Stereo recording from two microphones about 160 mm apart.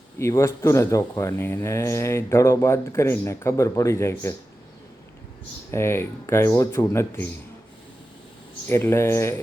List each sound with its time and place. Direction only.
0.2 s speech: 20° left (ahead or behind)
5.7 s speech: 15° left (ahead or behind)
8.7 s speech: 15° left (ahead or behind)